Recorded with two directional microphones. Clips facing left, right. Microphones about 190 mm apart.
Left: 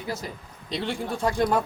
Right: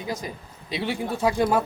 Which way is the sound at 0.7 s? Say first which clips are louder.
Right 2 dB; 5° right (ahead or behind).